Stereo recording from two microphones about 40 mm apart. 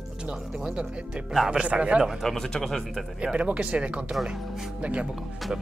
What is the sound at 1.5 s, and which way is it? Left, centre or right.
Speech, right.